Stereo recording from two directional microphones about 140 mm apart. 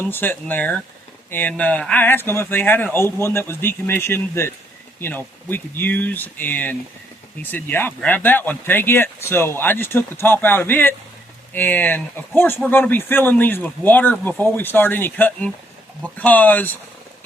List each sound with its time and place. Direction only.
0.0 s speech: 15° left (ahead or behind)